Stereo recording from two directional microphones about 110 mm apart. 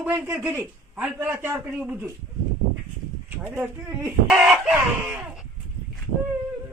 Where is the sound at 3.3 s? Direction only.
15° right (ahead or behind).